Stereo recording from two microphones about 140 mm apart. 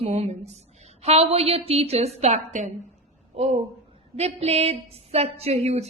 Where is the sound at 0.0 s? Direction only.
50° right (ahead or behind).